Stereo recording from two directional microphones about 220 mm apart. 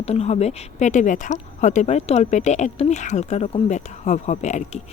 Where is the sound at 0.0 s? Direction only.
30° left (ahead or behind).